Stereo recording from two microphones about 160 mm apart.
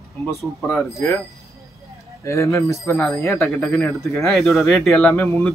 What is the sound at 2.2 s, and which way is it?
Speech, 20° left (ahead or behind).